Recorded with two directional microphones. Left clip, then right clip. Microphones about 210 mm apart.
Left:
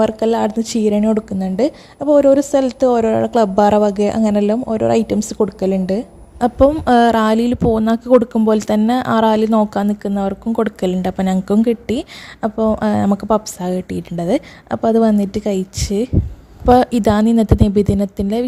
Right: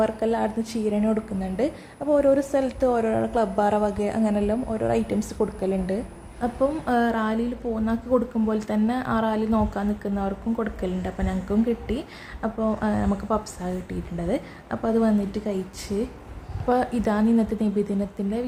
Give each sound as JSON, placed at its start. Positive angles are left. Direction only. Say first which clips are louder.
{"t": 0.0, "sound": "a woman's voice", "louder": "left 8 dB", "side_deg": 45}